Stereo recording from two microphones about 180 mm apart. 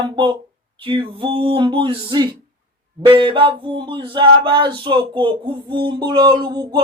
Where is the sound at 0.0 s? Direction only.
30° right (ahead or behind).